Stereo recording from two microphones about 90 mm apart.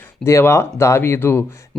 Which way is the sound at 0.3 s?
30° left (ahead or behind).